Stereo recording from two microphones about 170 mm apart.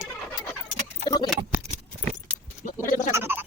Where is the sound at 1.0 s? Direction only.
25° left (ahead or behind).